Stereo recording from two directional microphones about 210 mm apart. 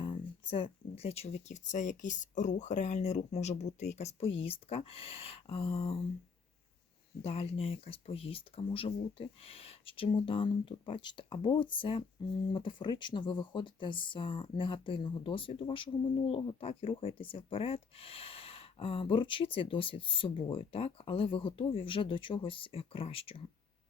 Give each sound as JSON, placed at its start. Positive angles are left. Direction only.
{"t": 0.5, "sound": "speech", "side_deg": 30}
{"t": 7.2, "sound": "speech", "side_deg": 30}